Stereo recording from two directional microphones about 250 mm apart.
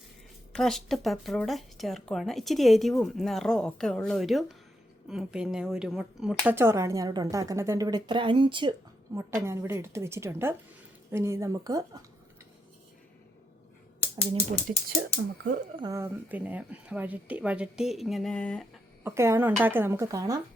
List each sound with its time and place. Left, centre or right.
0.5 s speech: centre
15.7 s speech: centre
19.0 s speech: centre